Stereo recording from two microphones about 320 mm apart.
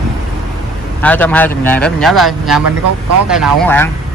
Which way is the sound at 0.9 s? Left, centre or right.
Centre.